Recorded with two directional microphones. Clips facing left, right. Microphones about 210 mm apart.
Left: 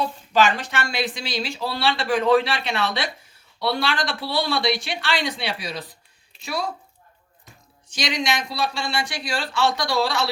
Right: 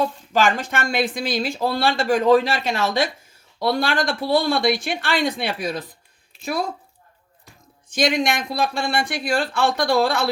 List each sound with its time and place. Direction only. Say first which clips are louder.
0.0 s speech: right 1 dB; 50° right (ahead or behind)
7.9 s speech: right 5 dB; 55° right (ahead or behind)